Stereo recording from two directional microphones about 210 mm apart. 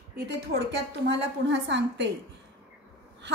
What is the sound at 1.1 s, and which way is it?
A woman's voice, 60° right (ahead or behind).